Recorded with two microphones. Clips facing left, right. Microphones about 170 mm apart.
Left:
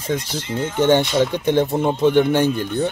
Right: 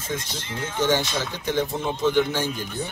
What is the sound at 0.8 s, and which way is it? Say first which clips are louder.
A man's voice: left 8 dB; 60° left (ahead or behind).